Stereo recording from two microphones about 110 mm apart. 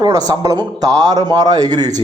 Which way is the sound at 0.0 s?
35° right (ahead or behind).